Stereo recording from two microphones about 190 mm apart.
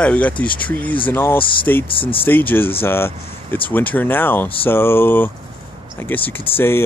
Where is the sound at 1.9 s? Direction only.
30° left (ahead or behind).